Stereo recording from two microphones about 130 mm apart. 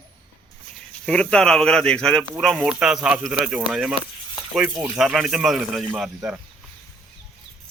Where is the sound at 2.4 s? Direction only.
5° right (ahead or behind).